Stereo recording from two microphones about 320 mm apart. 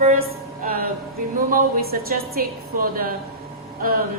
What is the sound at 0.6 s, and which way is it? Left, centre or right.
Music, right.